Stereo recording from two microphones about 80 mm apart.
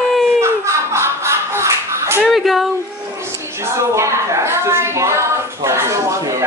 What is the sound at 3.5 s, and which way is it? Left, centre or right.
A woman's voice, right.